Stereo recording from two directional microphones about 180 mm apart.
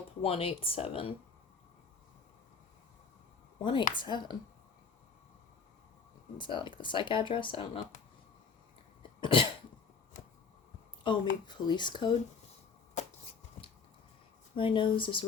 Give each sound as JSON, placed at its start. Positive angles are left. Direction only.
{"t": 0.2, "sound": "speech", "side_deg": 30}
{"t": 3.6, "sound": "speech", "side_deg": 25}
{"t": 6.3, "sound": "speech", "side_deg": 25}
{"t": 9.2, "sound": "speech", "side_deg": 30}
{"t": 11.1, "sound": "speech", "side_deg": 25}
{"t": 13.0, "sound": "a sound", "side_deg": 40}
{"t": 14.5, "sound": "speech", "side_deg": 30}